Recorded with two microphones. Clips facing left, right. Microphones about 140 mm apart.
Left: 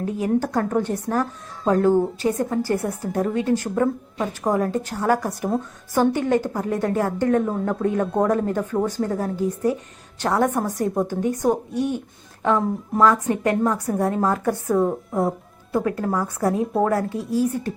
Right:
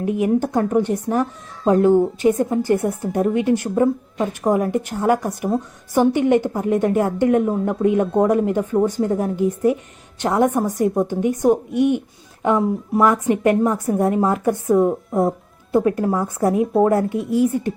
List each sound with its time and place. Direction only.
0.0 s a woman's voice: 15° right (ahead or behind)